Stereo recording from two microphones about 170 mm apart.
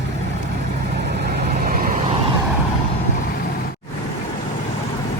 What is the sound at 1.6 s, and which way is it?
Vehicle, 60° right (ahead or behind).